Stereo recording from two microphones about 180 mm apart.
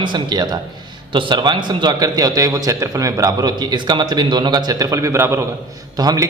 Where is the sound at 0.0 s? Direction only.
25° right (ahead or behind).